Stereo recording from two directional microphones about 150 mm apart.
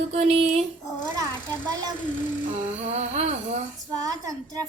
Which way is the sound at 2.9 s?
45° right (ahead or behind).